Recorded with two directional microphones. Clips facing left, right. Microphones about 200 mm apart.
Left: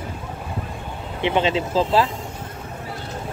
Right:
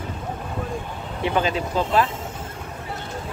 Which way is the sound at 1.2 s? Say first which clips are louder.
Left 2 dB; 25° left (ahead or behind).